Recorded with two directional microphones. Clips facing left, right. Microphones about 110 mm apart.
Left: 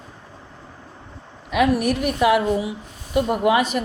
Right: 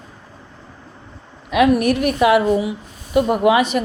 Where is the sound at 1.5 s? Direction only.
80° right.